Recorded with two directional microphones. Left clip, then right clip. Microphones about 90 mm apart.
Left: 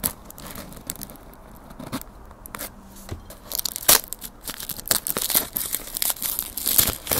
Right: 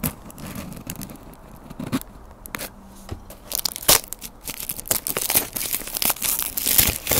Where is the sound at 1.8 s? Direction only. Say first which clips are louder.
Right 5 dB; 25° right (ahead or behind).